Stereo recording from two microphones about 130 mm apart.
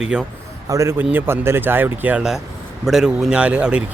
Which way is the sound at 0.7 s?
20° right (ahead or behind).